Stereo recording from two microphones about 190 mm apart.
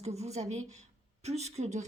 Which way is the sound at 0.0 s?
35° right (ahead or behind).